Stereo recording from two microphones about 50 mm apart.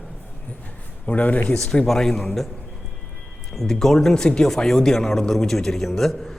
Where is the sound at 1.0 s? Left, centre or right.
Left.